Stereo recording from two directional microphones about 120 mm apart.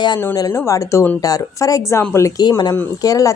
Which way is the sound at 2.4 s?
35° left (ahead or behind).